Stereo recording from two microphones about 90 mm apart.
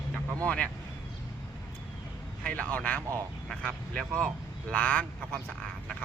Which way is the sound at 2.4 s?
15° left (ahead or behind).